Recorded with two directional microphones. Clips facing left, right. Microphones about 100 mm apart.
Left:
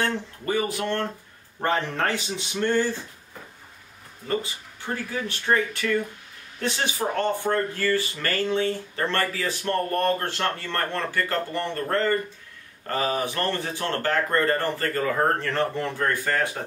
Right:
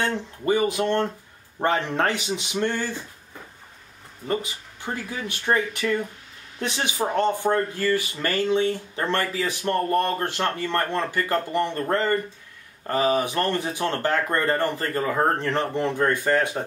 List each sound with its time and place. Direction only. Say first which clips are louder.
0.0 s speech: right 2 dB; 20° right (ahead or behind)
4.3 s speech: right 1 dB; 15° right (ahead or behind)